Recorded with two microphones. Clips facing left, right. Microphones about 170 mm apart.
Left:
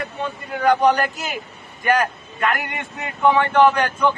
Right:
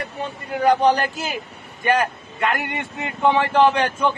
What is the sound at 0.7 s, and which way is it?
Speech, 30° right (ahead or behind).